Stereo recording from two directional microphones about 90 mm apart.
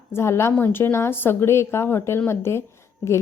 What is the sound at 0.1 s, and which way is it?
A woman's voice, 30° left (ahead or behind).